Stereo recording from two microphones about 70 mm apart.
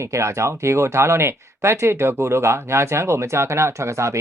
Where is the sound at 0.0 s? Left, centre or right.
Right.